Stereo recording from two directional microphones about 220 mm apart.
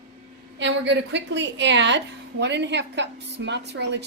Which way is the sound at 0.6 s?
55° right (ahead or behind).